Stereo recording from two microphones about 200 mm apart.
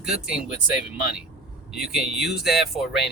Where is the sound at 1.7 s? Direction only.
Centre (ahead or behind).